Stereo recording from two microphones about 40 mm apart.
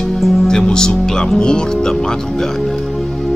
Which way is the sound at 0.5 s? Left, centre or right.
Centre.